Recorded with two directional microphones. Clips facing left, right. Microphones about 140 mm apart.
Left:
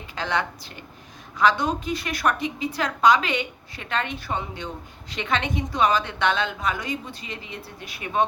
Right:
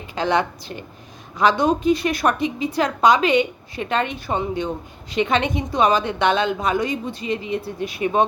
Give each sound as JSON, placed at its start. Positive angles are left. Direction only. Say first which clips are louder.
{"t": 0.2, "sound": "a woman's voice", "louder": "right 6 dB", "side_deg": -15}